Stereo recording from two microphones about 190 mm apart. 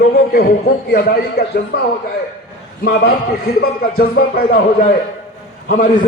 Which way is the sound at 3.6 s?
50° left (ahead or behind).